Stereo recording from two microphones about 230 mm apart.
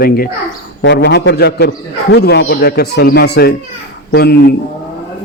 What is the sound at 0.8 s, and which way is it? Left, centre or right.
A man's voice, left.